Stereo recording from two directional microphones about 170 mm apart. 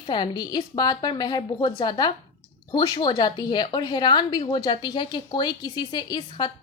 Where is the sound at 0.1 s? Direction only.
25° left (ahead or behind).